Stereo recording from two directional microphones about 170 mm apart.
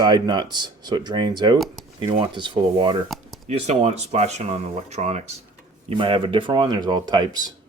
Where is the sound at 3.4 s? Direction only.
40° right (ahead or behind); by 7.5 s 25° right (ahead or behind).